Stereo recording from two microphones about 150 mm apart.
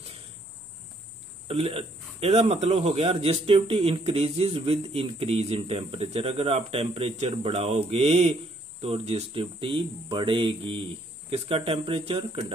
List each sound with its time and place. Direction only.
1.5 s a man's voice: 40° right (ahead or behind)